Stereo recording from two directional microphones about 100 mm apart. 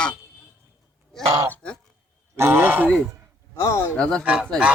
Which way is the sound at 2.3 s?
25° right (ahead or behind).